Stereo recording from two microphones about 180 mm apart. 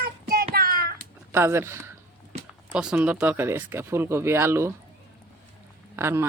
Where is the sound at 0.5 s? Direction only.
55° right (ahead or behind).